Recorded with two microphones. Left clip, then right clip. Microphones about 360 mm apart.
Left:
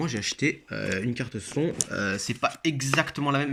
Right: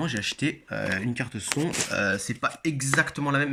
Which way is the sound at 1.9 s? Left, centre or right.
Centre.